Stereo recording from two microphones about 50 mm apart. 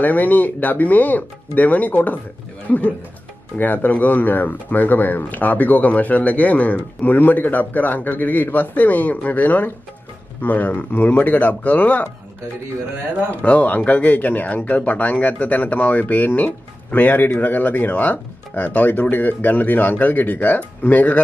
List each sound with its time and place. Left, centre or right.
0.0 s speech: left
3.5 s speech: left
13.3 s speech: left